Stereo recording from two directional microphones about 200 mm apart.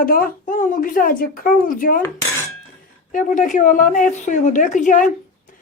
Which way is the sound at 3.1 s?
40° left (ahead or behind).